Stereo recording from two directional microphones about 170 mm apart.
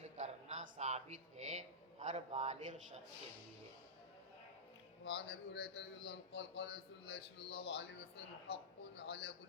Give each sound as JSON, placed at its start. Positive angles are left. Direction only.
{"t": 0.0, "sound": "a sound", "side_deg": -40}
{"t": 2.0, "sound": "a man's voice", "side_deg": -40}
{"t": 5.0, "sound": "a man's voice", "side_deg": 90}
{"t": 7.5, "sound": "a woman's voice", "side_deg": 35}
{"t": 9.0, "sound": "a man's voice", "side_deg": 75}